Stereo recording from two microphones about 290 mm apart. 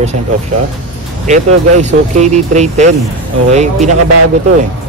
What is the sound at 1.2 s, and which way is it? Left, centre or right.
Speech, right.